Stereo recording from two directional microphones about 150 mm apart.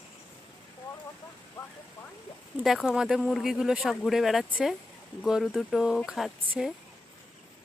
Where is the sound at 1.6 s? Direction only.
10° left (ahead or behind).